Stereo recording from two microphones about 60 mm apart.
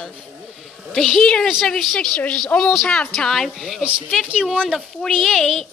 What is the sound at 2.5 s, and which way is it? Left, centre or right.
Speech, left.